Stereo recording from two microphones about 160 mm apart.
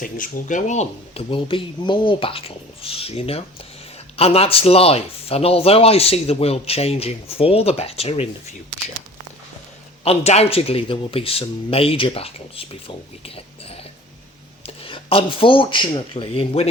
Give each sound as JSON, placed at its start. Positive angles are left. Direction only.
{"t": 0.0, "sound": "speech", "side_deg": 55}
{"t": 10.0, "sound": "speech", "side_deg": 40}